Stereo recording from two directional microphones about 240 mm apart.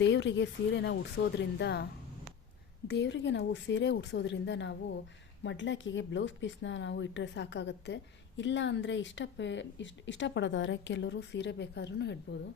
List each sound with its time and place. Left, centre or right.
0.0 s speech: left